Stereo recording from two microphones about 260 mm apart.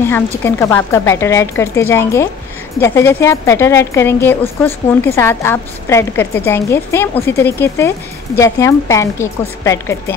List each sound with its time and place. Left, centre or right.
0.0 s a woman's voice: centre